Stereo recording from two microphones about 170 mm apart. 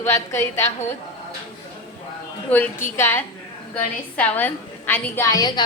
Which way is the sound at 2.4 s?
10° left (ahead or behind).